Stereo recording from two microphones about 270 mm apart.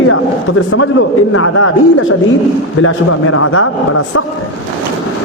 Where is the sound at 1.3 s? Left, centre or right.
Left.